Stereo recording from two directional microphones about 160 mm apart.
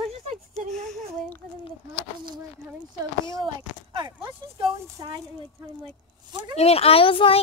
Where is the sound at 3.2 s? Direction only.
20° right (ahead or behind).